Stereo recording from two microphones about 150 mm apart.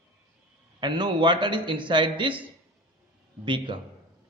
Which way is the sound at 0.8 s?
30° right (ahead or behind).